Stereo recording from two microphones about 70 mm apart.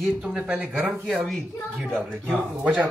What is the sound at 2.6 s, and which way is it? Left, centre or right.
Speech, centre.